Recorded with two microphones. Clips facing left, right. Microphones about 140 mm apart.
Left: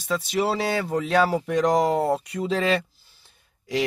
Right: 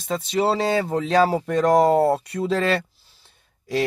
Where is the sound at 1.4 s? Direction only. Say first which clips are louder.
Right 3 dB; 55° right (ahead or behind).